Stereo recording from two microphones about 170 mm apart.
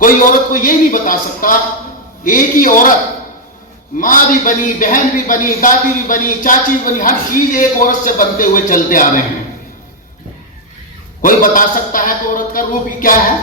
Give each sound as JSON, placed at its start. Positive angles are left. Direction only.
{"t": 0.0, "sound": "speech", "side_deg": 50}
{"t": 3.9, "sound": "speech", "side_deg": 55}
{"t": 11.2, "sound": "speech", "side_deg": 55}